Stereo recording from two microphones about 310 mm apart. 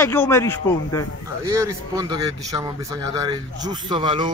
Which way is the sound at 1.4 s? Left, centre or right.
Centre.